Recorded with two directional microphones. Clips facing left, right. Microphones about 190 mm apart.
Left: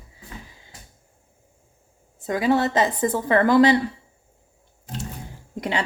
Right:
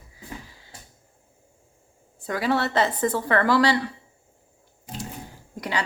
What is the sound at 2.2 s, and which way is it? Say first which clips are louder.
A woman's voice: left 4 dB; 20° left (ahead or behind).